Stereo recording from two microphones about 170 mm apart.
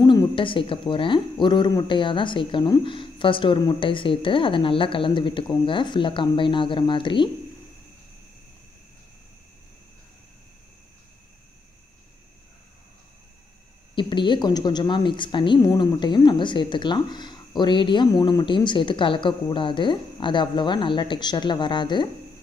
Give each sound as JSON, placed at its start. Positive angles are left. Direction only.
{"t": 0.0, "sound": "a woman's voice", "side_deg": 25}
{"t": 13.9, "sound": "a woman's voice", "side_deg": 30}